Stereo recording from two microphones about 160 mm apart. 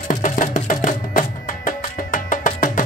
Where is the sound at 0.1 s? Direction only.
55° left (ahead or behind).